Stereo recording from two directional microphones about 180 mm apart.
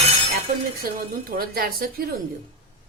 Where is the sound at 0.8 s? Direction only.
55° right (ahead or behind).